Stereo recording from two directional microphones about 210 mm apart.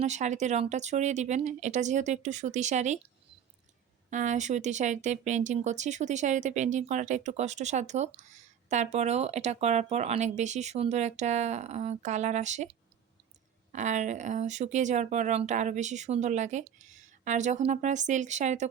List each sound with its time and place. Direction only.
0.0 s speech: 35° right (ahead or behind)
4.1 s speech: 35° right (ahead or behind)